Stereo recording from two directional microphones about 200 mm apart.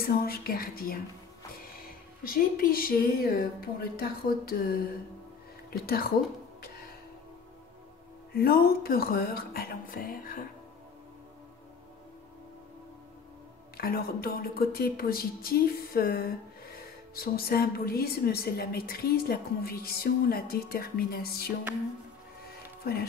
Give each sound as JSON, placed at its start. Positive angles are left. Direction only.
{"t": 0.0, "sound": "a woman's voice", "side_deg": 50}
{"t": 8.4, "sound": "a woman's voice", "side_deg": 50}
{"t": 13.7, "sound": "a woman's voice", "side_deg": 50}